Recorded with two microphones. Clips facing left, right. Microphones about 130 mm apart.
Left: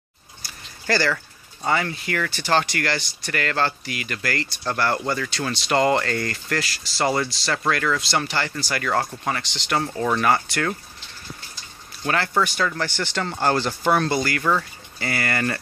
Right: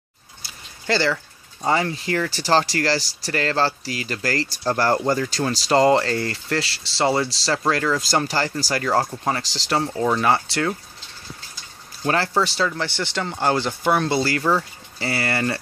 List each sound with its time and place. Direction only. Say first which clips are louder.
0.8 s speech: right 1 dB; 20° right (ahead or behind)
8.1 s speech: right 3 dB; 40° right (ahead or behind)
9.0 s speech: right 3 dB; 20° right (ahead or behind)
9.3 s speech: right 1 dB; 35° right (ahead or behind)
9.8 s speech: right 2 dB; 20° right (ahead or behind)
12.0 s speech: right 2 dB; 30° right (ahead or behind)
14.1 s speech: right 2 dB; 30° right (ahead or behind)